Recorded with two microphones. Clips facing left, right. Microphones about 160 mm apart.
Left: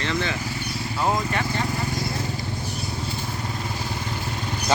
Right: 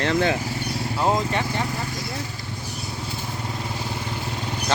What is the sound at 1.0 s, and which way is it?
Speech, 20° right (ahead or behind).